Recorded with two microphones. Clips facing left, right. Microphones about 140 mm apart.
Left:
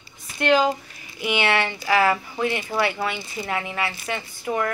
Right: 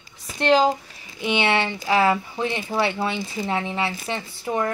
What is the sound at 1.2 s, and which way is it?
Speech, 25° right (ahead or behind).